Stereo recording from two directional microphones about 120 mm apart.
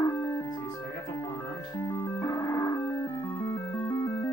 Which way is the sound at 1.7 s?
25° left (ahead or behind).